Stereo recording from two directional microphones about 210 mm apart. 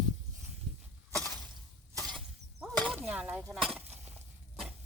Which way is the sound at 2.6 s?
Centre (ahead or behind).